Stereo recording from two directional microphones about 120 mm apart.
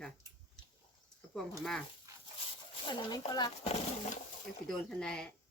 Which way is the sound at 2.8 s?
40° left (ahead or behind).